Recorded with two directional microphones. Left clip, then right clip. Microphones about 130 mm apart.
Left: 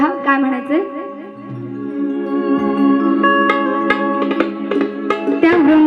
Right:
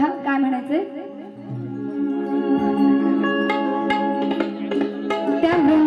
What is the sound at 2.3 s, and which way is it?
Music, 15° left (ahead or behind).